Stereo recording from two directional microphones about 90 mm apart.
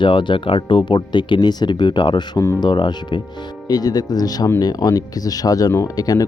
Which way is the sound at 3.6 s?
45° left (ahead or behind).